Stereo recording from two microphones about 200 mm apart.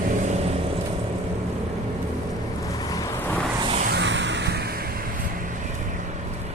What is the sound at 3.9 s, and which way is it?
Music, 65° right (ahead or behind).